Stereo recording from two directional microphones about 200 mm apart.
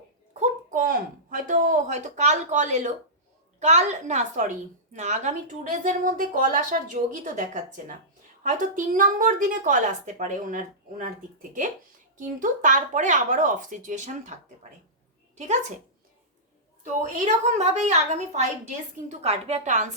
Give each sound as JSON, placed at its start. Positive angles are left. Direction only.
{"t": 0.3, "sound": "a child's voice", "side_deg": -45}
{"t": 12.1, "sound": "a woman's voice", "side_deg": -40}
{"t": 16.8, "sound": "a woman's voice", "side_deg": -40}